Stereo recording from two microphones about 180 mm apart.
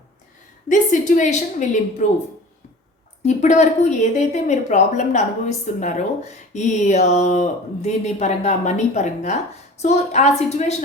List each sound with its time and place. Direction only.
0.7 s a woman's voice: 45° left (ahead or behind)
3.2 s a woman's voice: 40° left (ahead or behind)